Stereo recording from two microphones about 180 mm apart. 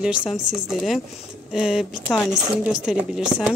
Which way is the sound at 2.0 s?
10° left (ahead or behind).